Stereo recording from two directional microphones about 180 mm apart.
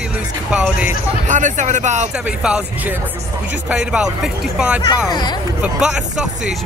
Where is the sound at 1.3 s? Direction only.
45° right (ahead or behind).